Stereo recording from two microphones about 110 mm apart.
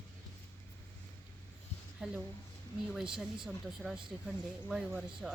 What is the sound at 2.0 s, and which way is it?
Speech, 5° right (ahead or behind).